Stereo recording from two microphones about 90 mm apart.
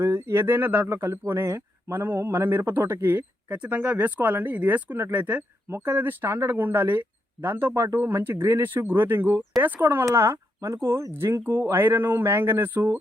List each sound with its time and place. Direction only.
0.0 s speech: 30° right (ahead or behind)
10.1 s speech: 35° right (ahead or behind)